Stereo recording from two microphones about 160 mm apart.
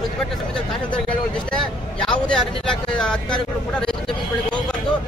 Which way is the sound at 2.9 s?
5° left (ahead or behind).